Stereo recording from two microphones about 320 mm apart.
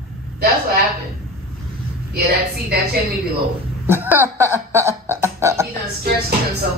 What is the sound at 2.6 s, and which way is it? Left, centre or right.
Speech, right.